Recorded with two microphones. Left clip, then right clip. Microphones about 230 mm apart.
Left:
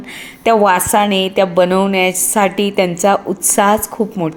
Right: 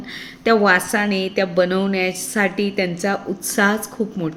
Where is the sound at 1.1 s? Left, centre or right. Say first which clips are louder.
Left 7 dB; left.